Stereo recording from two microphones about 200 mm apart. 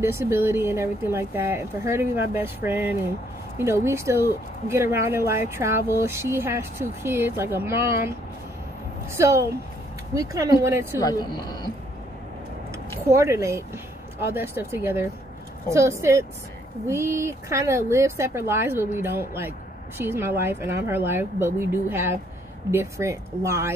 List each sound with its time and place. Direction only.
0.0 s speech: 10° right (ahead or behind)
9.1 s speech: 15° right (ahead or behind)
11.0 s speech: 20° left (ahead or behind)
13.1 s speech: 15° right (ahead or behind)